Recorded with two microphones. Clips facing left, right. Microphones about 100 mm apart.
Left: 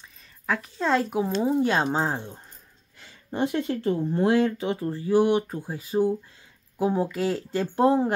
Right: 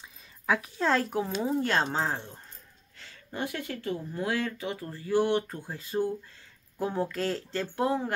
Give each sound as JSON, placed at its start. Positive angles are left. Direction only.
{"t": 0.5, "sound": "speech", "side_deg": 0}
{"t": 7.6, "sound": "speech", "side_deg": 25}